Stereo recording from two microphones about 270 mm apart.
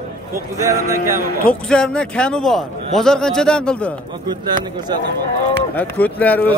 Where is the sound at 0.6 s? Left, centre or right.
Centre.